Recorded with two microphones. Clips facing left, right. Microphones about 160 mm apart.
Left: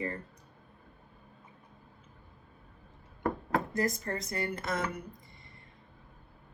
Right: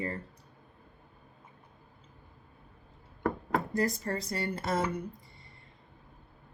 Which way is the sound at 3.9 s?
30° right (ahead or behind).